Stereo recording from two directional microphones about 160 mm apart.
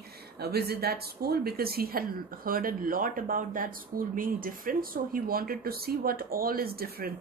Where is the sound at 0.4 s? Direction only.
80° right.